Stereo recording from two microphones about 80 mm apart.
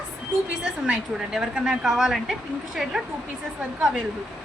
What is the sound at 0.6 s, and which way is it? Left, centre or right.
A woman's voice, centre.